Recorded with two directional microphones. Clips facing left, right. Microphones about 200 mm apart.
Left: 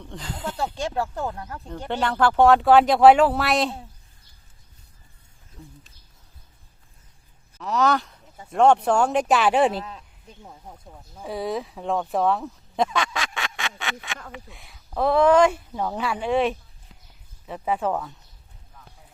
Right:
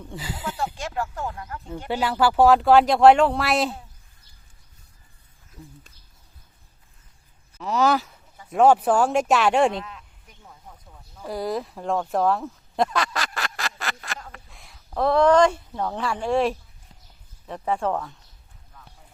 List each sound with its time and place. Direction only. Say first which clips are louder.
0.0 s speech: even; 5° right (ahead or behind)
0.5 s speech: left 3 dB; 30° left (ahead or behind)
1.9 s speech: even; 5° right (ahead or behind)
5.6 s a sound: right 1 dB; 5° right (ahead or behind)
7.6 s speech: right 1 dB; centre (ahead or behind)
9.8 s a sound: left 3 dB; 30° left (ahead or behind)
11.2 s speech: even; centre (ahead or behind)